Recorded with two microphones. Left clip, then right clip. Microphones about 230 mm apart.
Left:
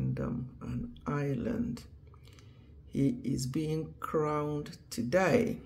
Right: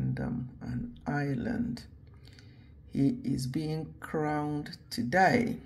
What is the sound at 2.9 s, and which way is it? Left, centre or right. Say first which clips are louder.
Speech: right 2 dB; centre.